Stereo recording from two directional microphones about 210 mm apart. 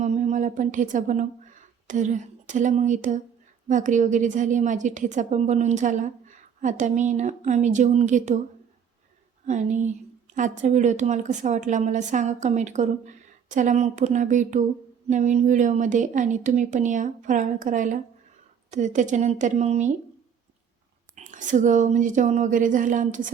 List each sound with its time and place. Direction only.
0.0 s a woman's voice: 35° right (ahead or behind)
9.5 s a woman's voice: 35° right (ahead or behind)
21.2 s a woman's voice: 35° right (ahead or behind)